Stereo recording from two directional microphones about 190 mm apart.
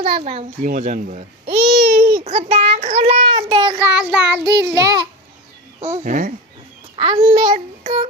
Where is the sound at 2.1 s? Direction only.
30° right (ahead or behind).